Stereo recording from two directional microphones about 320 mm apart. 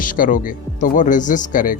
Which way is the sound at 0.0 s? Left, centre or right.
Left.